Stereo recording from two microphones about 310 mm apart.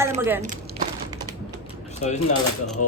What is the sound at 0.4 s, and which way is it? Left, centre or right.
Crumpling, right.